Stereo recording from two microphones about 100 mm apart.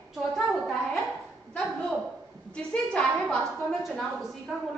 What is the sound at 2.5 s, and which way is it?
A woman's voice, 10° left (ahead or behind).